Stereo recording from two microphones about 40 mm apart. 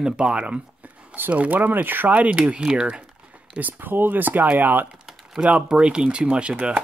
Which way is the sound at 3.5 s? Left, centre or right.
Right.